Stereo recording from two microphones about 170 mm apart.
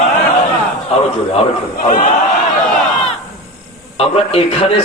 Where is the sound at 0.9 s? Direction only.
35° left (ahead or behind).